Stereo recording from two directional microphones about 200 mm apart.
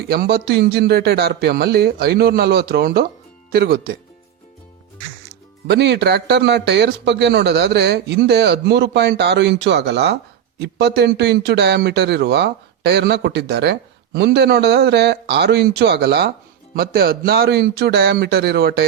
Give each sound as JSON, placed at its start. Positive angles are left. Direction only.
{"t": 0.0, "sound": "speech", "side_deg": -55}
{"t": 5.6, "sound": "speech", "side_deg": -55}